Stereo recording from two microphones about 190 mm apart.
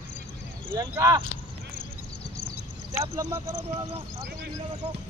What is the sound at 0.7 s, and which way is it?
Speech, 20° right (ahead or behind).